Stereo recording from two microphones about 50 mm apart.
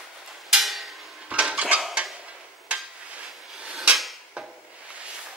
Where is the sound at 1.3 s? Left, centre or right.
Right.